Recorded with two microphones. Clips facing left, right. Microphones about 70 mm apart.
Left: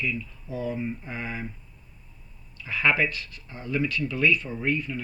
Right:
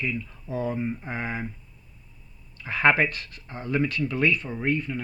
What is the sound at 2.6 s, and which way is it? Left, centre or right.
Speech, right.